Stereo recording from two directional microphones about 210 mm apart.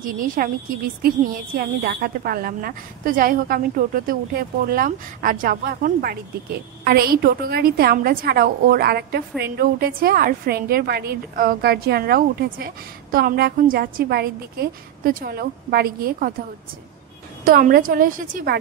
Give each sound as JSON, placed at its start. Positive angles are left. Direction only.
{"t": 0.0, "sound": "a woman's voice", "side_deg": -40}
{"t": 17.5, "sound": "a woman's voice", "side_deg": -45}